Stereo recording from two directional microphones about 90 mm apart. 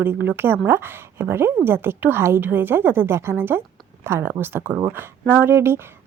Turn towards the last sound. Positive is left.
turn(degrees=-25)  # may be behind; listen again after turning